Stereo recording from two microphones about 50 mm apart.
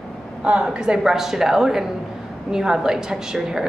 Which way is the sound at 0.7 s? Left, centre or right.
Centre.